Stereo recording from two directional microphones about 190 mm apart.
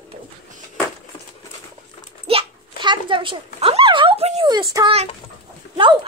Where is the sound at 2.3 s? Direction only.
25° right (ahead or behind).